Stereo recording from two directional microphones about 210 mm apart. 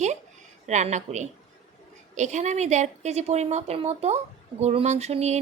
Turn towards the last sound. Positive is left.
turn(degrees=-30)  # may be behind; listen again after turning